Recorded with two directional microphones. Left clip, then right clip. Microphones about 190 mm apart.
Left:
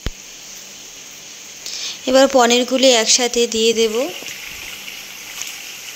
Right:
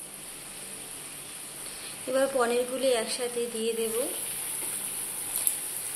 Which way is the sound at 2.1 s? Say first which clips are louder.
Left 13 dB; 45° left (ahead or behind).